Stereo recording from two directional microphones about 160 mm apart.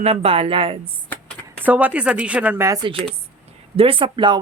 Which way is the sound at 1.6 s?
10° right (ahead or behind).